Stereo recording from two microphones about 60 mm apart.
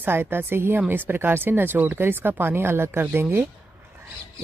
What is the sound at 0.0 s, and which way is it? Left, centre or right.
Speech, right.